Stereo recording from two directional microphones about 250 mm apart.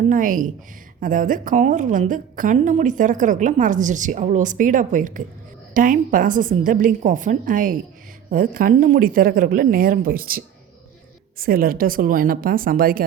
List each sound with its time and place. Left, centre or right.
0.0 s a woman's voice: right